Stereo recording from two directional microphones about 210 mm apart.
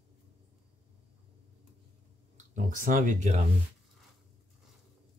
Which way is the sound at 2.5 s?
40° right (ahead or behind).